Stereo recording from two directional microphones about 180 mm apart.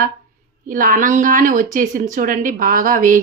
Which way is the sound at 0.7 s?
50° right (ahead or behind).